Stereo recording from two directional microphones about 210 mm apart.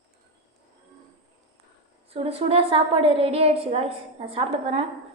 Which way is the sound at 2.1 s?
25° right (ahead or behind).